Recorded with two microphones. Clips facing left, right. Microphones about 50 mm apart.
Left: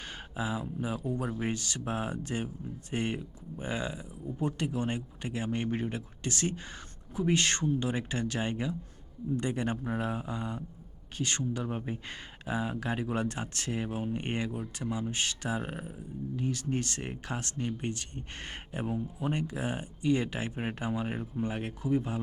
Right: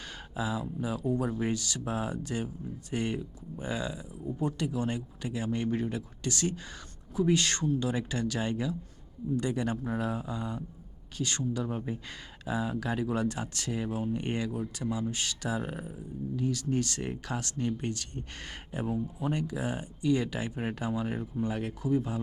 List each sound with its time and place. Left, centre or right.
0.3 s speech: left